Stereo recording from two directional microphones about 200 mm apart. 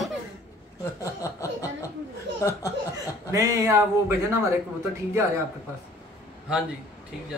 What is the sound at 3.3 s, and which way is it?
Speech, 15° right (ahead or behind).